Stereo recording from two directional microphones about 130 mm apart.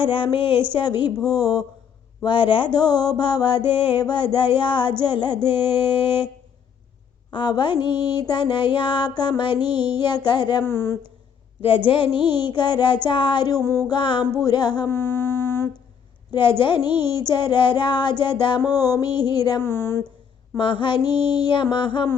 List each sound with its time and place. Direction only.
0.0 s female singing: 40° left (ahead or behind)
7.3 s female singing: 35° left (ahead or behind)
10.6 s speech: 20° left (ahead or behind)
11.9 s female singing: 40° left (ahead or behind)
13.7 s speech: 25° left (ahead or behind)
13.9 s female singing: 35° left (ahead or behind)
14.8 s a sound: 20° left (ahead or behind)
16.3 s female singing: 35° left (ahead or behind)
19.6 s speech: 20° left (ahead or behind)
20.6 s female singing: 40° left (ahead or behind)
21.1 s child singing: 15° right (ahead or behind)
21.3 s female singing: 35° left (ahead or behind)